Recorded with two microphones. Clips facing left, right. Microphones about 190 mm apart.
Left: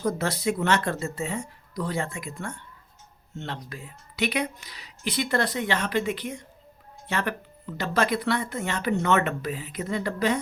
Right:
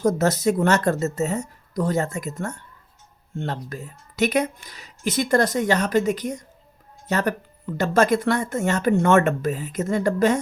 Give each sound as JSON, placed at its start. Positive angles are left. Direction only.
{"t": 0.0, "sound": "speech", "side_deg": -45}